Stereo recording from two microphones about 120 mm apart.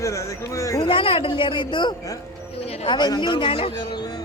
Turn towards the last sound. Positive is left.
turn(degrees=35)  # may be behind; listen again after turning